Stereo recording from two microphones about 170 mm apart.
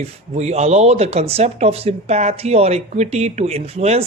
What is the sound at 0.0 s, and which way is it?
Speech, 40° right (ahead or behind).